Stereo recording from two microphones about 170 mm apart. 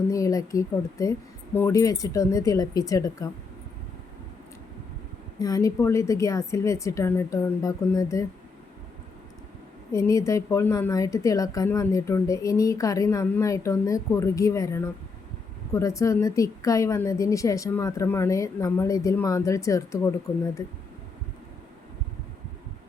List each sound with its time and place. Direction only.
0.1 s a woman's voice: 20° left (ahead or behind)
5.4 s a woman's voice: 20° left (ahead or behind)
9.9 s a woman's voice: 20° left (ahead or behind)